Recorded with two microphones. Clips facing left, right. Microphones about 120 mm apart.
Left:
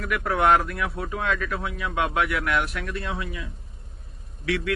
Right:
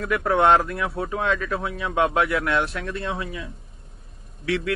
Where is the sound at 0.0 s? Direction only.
30° right (ahead or behind).